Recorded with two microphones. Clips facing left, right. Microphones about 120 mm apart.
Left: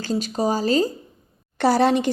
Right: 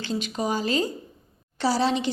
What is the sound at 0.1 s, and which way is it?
Speech, 35° left (ahead or behind).